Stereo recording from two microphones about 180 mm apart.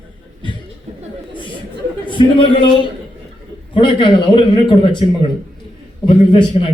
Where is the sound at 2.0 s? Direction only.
25° left (ahead or behind).